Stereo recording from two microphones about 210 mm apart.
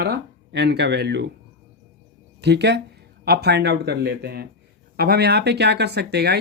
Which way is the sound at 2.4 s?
55° right (ahead or behind).